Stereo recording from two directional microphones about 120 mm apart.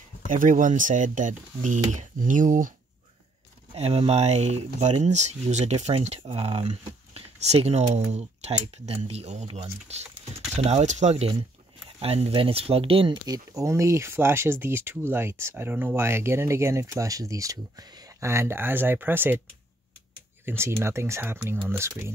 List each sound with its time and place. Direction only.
0.3 s speech: 90° right
3.7 s speech: 60° right (ahead or behind)
12.0 s speech: 55° right (ahead or behind)
13.3 s speech: 25° right (ahead or behind)
20.4 s speech: 20° right (ahead or behind)